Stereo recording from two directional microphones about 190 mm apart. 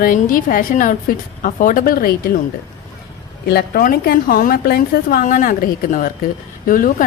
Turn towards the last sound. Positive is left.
turn(degrees=45)  # may be behind; listen again after turning